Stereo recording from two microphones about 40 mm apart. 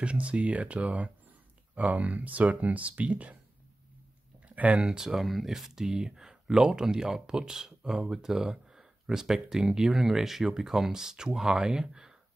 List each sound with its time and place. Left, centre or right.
0.0 s speech: right
4.7 s speech: centre
5.2 s speech: centre